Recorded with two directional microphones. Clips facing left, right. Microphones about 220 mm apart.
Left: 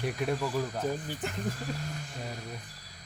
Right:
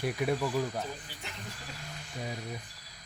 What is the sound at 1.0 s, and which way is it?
Speech, 45° left (ahead or behind).